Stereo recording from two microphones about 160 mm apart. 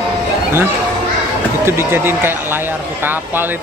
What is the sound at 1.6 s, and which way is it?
Speech, 15° right (ahead or behind).